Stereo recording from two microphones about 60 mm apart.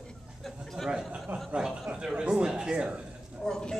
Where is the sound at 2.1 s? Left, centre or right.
Centre.